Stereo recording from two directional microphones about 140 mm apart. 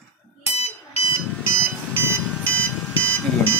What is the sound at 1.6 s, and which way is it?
Alarm clock, 15° right (ahead or behind).